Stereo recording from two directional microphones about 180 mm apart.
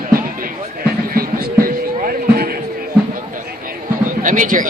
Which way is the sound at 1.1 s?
55° right (ahead or behind).